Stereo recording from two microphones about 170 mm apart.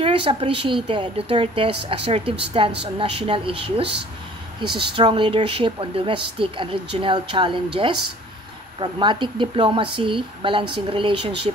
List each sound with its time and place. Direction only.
0.0 s a woman's voice: 35° right (ahead or behind)